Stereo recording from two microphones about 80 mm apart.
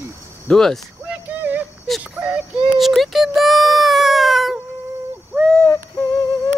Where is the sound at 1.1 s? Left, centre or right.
Centre.